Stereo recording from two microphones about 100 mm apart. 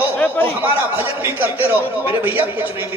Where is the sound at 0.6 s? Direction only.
20° right (ahead or behind).